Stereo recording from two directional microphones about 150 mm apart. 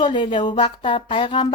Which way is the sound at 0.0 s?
30° left (ahead or behind).